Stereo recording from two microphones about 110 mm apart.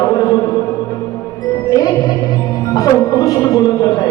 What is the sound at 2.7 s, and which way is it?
Music, 30° left (ahead or behind).